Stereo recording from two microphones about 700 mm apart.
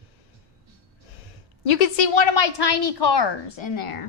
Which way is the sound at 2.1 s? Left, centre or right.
Left.